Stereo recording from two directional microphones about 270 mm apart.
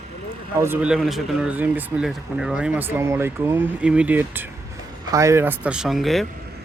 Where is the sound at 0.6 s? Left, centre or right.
Centre.